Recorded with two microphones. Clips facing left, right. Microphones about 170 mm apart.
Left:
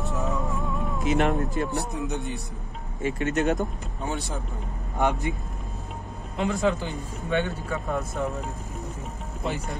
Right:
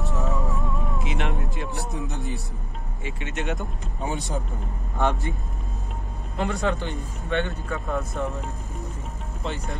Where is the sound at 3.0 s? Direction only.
40° left (ahead or behind).